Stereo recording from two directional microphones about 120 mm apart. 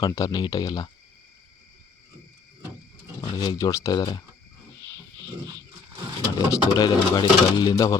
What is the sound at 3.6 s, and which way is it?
Speech, 30° left (ahead or behind).